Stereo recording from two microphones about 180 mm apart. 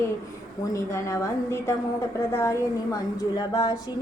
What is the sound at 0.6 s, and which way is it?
A woman's voice, 15° left (ahead or behind).